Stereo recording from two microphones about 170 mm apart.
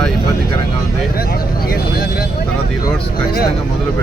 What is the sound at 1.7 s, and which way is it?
Vehicle, 60° left (ahead or behind).